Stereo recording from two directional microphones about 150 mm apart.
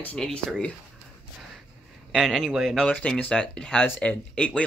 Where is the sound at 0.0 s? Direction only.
10° left (ahead or behind).